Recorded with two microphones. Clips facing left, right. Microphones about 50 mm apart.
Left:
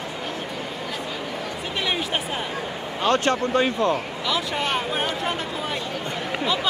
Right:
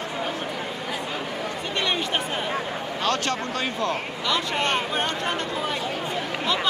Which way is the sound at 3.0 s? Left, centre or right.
Left.